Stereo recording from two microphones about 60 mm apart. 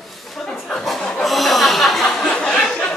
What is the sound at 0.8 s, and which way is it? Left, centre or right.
Chuckle, centre.